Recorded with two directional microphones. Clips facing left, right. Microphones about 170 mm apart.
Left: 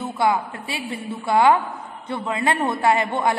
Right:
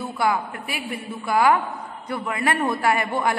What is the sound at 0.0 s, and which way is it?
A man's voice, 25° left (ahead or behind).